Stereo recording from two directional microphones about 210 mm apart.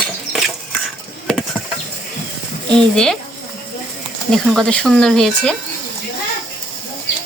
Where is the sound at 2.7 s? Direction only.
Centre (ahead or behind).